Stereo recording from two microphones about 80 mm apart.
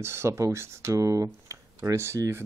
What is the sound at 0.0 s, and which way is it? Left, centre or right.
Speech, right.